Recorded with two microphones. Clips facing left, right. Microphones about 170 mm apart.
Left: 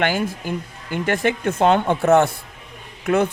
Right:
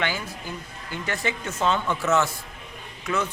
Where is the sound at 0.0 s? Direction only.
60° left (ahead or behind).